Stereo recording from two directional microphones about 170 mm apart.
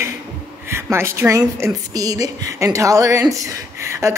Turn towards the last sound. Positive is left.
turn(degrees=-15)  # may be behind; listen again after turning